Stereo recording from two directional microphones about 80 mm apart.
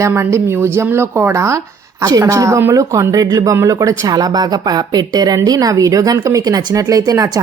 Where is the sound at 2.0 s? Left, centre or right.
Right.